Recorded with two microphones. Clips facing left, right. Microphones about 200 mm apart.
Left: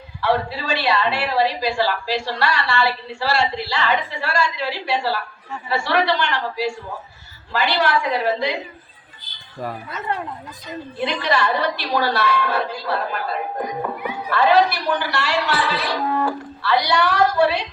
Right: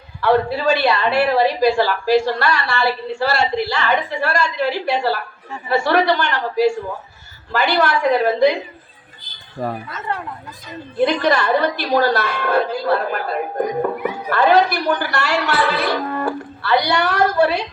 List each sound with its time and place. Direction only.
0.2 s a woman's voice: 50° right (ahead or behind)
11.0 s a woman's voice: 50° right (ahead or behind)